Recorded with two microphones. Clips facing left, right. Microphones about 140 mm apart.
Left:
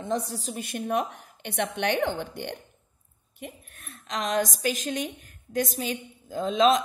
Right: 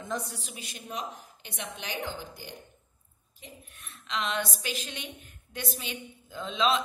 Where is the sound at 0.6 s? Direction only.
55° left (ahead or behind).